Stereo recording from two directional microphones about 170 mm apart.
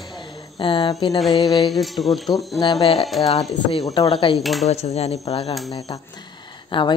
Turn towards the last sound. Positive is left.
turn(degrees=30)  # may be behind; listen again after turning